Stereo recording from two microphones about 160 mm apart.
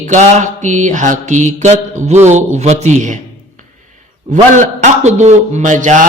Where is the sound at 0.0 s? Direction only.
50° right (ahead or behind).